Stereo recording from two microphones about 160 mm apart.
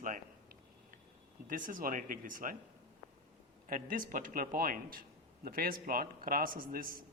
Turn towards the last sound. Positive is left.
turn(degrees=-60)  # may be behind; listen again after turning